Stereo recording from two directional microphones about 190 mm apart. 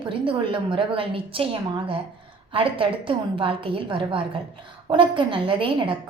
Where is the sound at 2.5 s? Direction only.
25° right (ahead or behind).